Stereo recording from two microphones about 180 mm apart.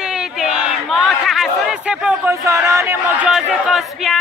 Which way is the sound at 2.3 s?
15° right (ahead or behind).